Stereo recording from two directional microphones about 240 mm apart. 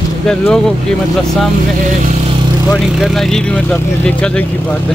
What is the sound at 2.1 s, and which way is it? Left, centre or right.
Vehicle, right.